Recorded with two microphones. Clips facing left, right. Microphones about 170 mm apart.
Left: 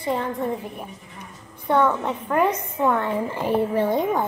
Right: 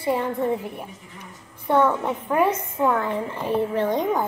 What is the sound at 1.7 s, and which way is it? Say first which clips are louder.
A woman's voice: even; 5° right (ahead or behind).